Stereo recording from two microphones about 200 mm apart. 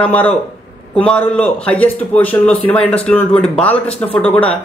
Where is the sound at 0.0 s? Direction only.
5° left (ahead or behind).